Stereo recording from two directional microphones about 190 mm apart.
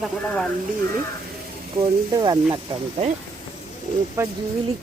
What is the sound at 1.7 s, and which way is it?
Speech, 25° right (ahead or behind).